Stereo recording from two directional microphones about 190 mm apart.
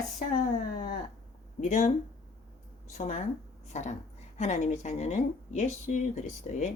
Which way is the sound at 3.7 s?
40° left (ahead or behind).